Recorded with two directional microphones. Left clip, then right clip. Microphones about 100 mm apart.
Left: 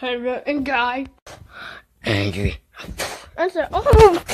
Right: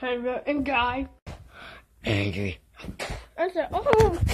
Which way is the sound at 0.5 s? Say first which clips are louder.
Left 4 dB; 50° left (ahead or behind).